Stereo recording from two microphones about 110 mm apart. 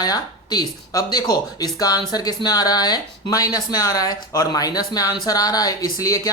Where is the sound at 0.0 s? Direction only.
35° left (ahead or behind).